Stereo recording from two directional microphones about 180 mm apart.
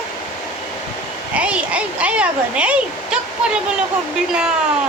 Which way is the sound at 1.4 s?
5° right (ahead or behind).